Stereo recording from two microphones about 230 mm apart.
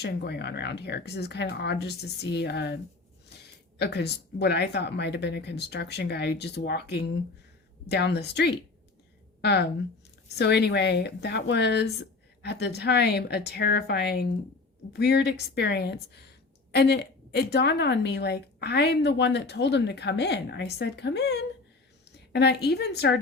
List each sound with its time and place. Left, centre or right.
0.0 s a woman's voice: left